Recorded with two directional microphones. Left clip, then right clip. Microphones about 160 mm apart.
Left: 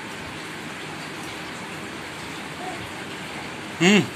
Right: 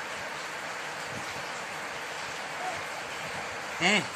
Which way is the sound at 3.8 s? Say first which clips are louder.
Left 6 dB; 5° right (ahead or behind).